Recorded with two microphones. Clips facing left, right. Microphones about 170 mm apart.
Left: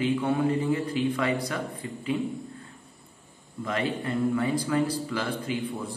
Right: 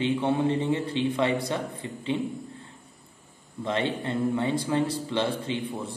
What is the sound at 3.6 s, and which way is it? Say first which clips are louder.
A man's voice: right 1 dB; 25° right (ahead or behind).